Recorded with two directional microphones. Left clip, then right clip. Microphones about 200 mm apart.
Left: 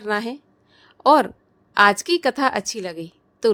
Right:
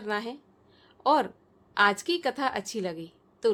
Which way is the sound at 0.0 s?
35° left (ahead or behind).